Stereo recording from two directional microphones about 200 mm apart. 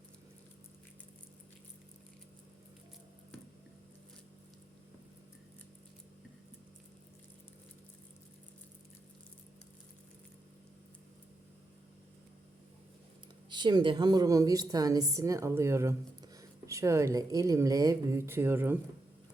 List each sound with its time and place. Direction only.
13.5 s a woman's voice: 20° right (ahead or behind)